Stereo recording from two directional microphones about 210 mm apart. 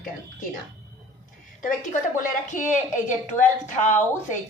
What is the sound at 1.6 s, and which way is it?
A woman's voice, 40° left (ahead or behind).